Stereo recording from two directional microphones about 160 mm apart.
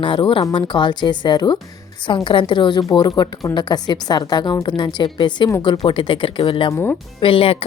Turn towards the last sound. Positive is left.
turn(degrees=35)  # may be behind; listen again after turning